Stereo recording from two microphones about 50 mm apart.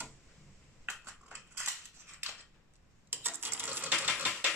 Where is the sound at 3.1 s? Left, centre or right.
Right.